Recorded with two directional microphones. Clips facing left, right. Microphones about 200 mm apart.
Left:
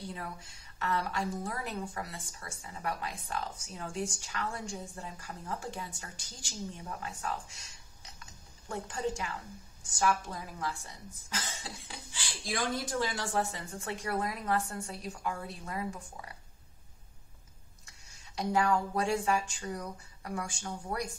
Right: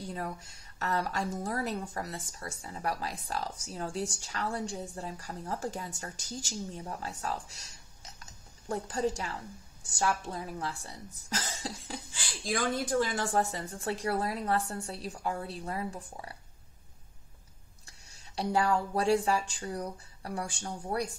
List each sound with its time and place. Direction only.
0.1 s a woman's voice: 40° right (ahead or behind)
8.2 s a sound: 40° right (ahead or behind)
9.8 s a woman's voice: 30° right (ahead or behind)
18.3 s a woman's voice: 30° right (ahead or behind)